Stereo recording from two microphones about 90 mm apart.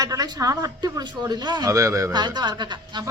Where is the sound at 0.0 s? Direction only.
40° right (ahead or behind).